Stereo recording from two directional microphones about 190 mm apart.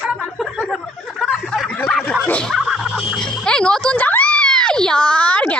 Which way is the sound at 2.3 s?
5° left (ahead or behind).